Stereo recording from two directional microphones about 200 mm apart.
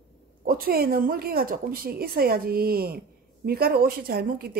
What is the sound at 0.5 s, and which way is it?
Speech, 45° right (ahead or behind).